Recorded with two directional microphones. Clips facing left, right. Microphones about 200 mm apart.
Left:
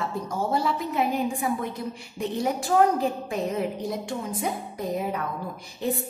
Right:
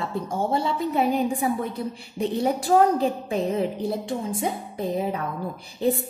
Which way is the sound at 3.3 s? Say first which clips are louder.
Right 3 dB; 30° right (ahead or behind).